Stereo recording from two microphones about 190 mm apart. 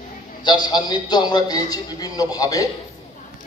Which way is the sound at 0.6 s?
20° left (ahead or behind).